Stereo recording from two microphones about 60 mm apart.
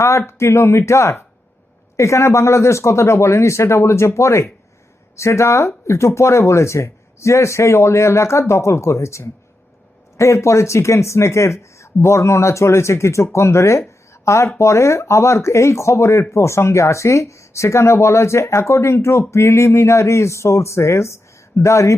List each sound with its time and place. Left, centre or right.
0.0 s speech: left